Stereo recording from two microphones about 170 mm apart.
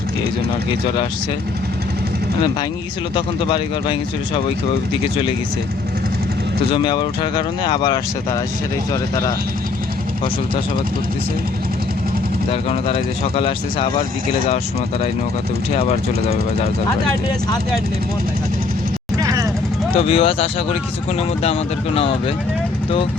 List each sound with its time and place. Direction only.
3.2 s speech: 30° left (ahead or behind)
6.7 s speech: 30° left (ahead or behind)
12.5 s speech: 35° left (ahead or behind)
19.1 s vehicle: 20° right (ahead or behind)
20.0 s speech: 35° left (ahead or behind)